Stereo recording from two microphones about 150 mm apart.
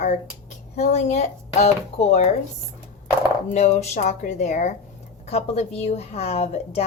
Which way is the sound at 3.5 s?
45° left (ahead or behind).